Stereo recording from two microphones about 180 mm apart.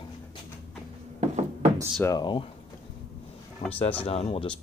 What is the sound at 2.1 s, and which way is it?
Speech, 25° left (ahead or behind).